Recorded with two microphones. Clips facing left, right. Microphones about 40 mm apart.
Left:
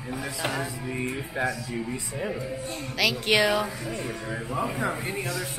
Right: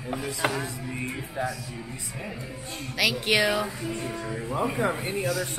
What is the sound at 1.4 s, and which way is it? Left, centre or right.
Speech, left.